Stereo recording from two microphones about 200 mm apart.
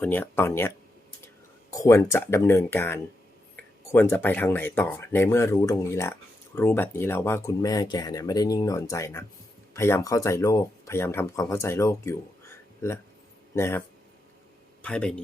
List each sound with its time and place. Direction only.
0.0 s speech: 10° left (ahead or behind)
1.7 s speech: 15° left (ahead or behind)
13.6 s speech: 15° left (ahead or behind)